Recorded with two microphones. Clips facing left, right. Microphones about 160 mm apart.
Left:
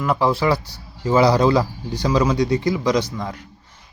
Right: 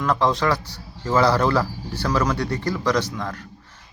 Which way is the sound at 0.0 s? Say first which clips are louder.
Left 2 dB; 10° left (ahead or behind).